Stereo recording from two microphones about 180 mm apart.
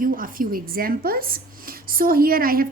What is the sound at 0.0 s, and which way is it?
A woman's voice, 50° right (ahead or behind).